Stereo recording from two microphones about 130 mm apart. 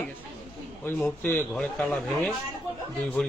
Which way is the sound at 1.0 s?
15° left (ahead or behind).